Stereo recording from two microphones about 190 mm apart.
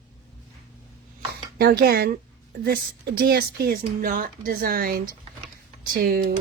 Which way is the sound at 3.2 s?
55° right (ahead or behind).